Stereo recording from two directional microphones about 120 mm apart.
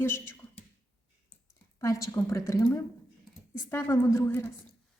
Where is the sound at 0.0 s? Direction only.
20° left (ahead or behind).